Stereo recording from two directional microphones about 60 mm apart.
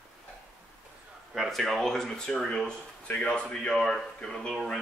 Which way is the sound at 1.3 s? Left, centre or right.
Centre.